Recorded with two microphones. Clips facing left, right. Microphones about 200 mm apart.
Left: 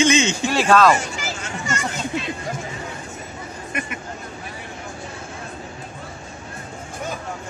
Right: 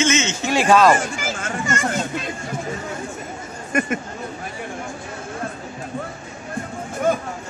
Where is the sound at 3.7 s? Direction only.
45° right (ahead or behind).